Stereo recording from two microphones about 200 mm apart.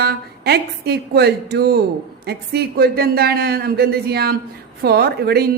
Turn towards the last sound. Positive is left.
turn(degrees=-50)  # may be behind; listen again after turning